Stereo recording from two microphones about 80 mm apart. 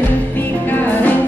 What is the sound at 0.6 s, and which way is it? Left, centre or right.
Music, left.